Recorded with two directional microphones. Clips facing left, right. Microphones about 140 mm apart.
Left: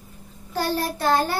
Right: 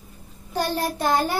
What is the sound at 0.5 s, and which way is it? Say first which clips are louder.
Speech: even; 15° right (ahead or behind).